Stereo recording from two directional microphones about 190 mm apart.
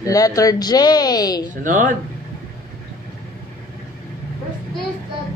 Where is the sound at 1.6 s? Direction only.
45° right (ahead or behind).